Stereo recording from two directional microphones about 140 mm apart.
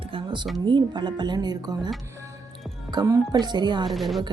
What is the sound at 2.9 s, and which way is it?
Speech, 30° right (ahead or behind).